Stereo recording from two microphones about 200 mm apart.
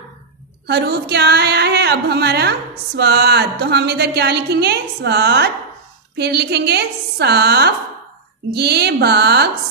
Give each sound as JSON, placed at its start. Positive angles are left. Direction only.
{"t": 0.7, "sound": "a woman's voice", "side_deg": -55}